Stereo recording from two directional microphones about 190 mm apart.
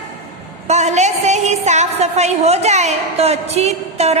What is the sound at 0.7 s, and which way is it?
A woman's voice, 35° right (ahead or behind).